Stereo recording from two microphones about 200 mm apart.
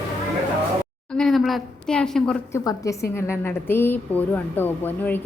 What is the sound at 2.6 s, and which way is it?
A woman's voice, 15° left (ahead or behind).